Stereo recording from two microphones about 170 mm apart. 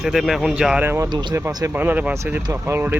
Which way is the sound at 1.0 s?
25° right (ahead or behind).